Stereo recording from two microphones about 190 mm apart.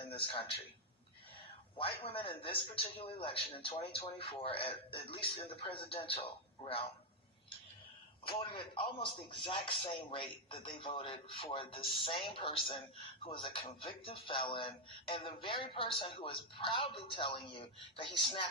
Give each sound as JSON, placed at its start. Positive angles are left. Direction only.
{"t": 0.0, "sound": "a sound", "side_deg": 30}
{"t": 1.8, "sound": "speech", "side_deg": 30}
{"t": 8.4, "sound": "speech", "side_deg": 25}